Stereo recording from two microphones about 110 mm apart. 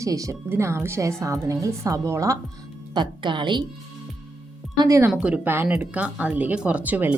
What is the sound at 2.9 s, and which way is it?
Speech, 45° right (ahead or behind).